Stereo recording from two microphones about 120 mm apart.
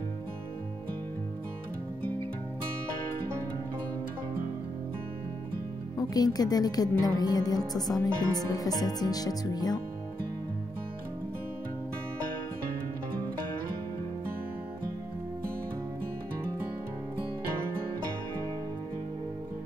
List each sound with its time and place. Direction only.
5.9 s speech: 30° left (ahead or behind)